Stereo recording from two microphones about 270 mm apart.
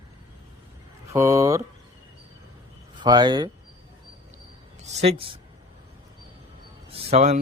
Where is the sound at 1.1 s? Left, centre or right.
Centre.